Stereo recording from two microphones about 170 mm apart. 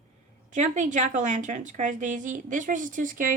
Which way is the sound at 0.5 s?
45° right (ahead or behind).